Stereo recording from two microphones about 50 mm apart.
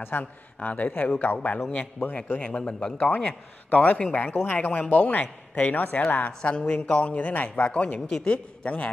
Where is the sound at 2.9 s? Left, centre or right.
Left.